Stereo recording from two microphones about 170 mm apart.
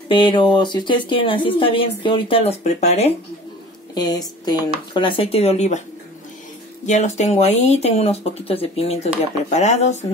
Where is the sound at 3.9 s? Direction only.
25° left (ahead or behind); by 5.8 s 40° left (ahead or behind).